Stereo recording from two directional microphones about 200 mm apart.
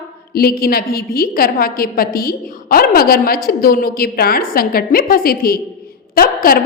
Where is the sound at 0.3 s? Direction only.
50° left (ahead or behind).